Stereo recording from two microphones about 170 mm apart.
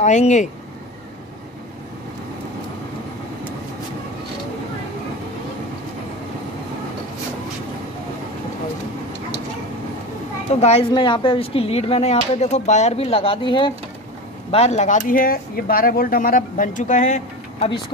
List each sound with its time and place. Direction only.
0.0 s speech: 45° left (ahead or behind)
10.5 s speech: 40° left (ahead or behind)
10.9 s speech: 25° left (ahead or behind)
14.5 s speech: 40° left (ahead or behind)